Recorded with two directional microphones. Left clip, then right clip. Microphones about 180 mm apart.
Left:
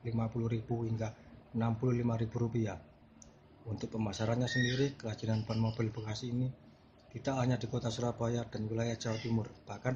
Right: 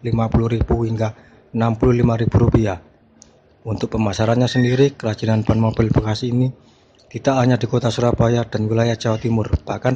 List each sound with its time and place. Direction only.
0.0 s speech: 55° right (ahead or behind)